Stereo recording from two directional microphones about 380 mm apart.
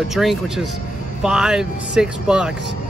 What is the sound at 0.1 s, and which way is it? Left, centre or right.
Speech, centre.